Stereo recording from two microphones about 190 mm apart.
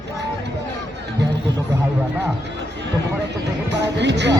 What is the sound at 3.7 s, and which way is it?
Speech, 65° right (ahead or behind).